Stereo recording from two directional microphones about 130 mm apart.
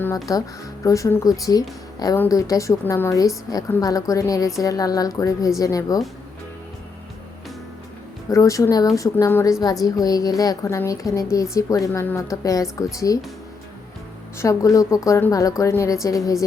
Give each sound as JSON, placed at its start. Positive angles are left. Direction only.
{"t": 0.3, "sound": "a woman's voice", "side_deg": 30}
{"t": 8.3, "sound": "a woman's voice", "side_deg": 25}
{"t": 14.3, "sound": "a woman's voice", "side_deg": 25}